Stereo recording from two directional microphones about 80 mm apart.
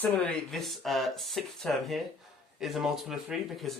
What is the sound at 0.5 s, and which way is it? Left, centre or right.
Speech, centre.